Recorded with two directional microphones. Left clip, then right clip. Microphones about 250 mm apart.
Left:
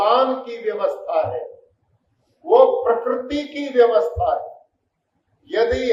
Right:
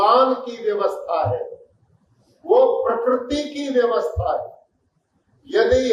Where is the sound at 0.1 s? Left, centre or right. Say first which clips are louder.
Right 2 dB; right.